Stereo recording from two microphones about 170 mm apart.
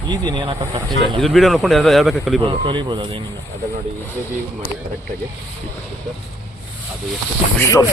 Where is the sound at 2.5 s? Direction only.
30° right (ahead or behind).